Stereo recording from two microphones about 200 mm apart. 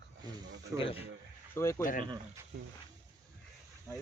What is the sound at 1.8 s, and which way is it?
Speech, 40° left (ahead or behind).